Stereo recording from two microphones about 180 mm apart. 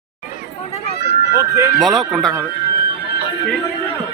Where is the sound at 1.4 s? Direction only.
20° right (ahead or behind).